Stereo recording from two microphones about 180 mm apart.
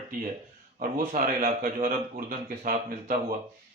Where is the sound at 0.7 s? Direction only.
45° right (ahead or behind).